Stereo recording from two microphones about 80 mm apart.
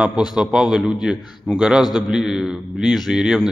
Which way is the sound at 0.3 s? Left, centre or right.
Centre.